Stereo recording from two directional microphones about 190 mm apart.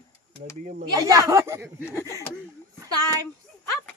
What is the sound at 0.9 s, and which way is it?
Speech, 15° right (ahead or behind).